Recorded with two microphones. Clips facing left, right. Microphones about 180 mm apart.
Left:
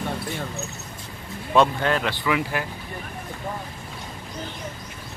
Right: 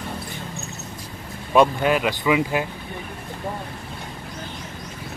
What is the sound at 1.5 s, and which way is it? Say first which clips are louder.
Speech: right 2 dB; 15° right (ahead or behind).